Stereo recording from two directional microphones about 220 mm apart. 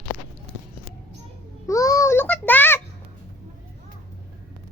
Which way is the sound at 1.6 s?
15° left (ahead or behind).